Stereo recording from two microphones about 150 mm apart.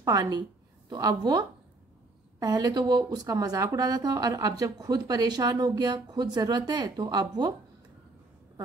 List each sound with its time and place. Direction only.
0.0 s a woman's voice: 25° right (ahead or behind)
2.4 s speech: 25° right (ahead or behind)